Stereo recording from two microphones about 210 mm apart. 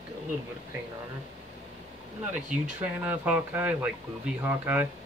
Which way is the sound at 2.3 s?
10° right (ahead or behind).